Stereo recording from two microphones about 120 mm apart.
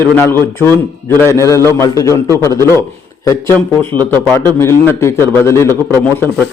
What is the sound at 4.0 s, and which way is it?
A man's voice, 15° left (ahead or behind).